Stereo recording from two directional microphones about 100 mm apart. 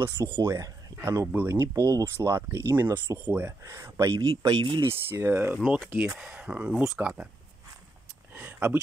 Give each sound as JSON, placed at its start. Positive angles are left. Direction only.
{"t": 0.4, "sound": "speech", "side_deg": -35}
{"t": 3.6, "sound": "speech", "side_deg": -30}
{"t": 4.8, "sound": "speech", "side_deg": -25}
{"t": 6.1, "sound": "speech", "side_deg": -10}
{"t": 8.4, "sound": "a sound", "side_deg": -20}